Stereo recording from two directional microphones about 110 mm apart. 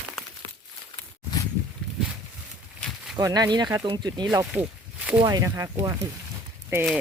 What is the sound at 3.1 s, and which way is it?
Speech, 35° right (ahead or behind).